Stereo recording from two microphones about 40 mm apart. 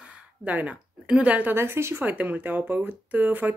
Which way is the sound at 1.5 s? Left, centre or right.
Right.